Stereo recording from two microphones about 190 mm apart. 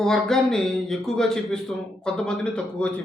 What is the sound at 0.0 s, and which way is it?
A man's voice, centre (ahead or behind).